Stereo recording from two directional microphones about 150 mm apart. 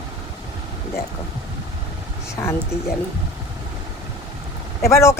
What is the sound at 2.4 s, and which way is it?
Speech, 20° left (ahead or behind).